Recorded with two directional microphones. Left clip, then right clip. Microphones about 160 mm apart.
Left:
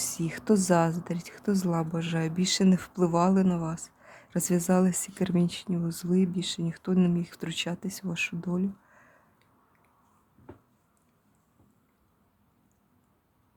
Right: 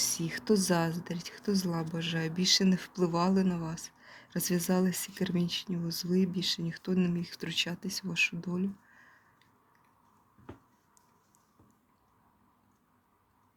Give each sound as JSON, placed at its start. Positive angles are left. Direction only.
{"t": 0.0, "sound": "speech", "side_deg": 35}